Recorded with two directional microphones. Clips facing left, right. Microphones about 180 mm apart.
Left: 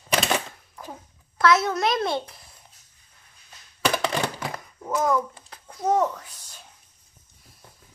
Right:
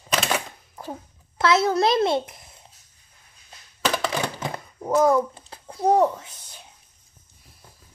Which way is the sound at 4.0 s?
5° right (ahead or behind).